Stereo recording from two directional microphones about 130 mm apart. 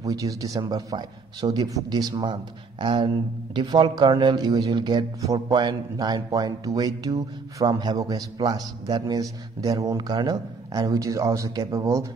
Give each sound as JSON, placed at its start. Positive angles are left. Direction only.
{"t": 0.0, "sound": "speech", "side_deg": -25}